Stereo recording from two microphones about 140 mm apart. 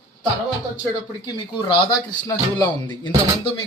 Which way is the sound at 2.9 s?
35° left (ahead or behind).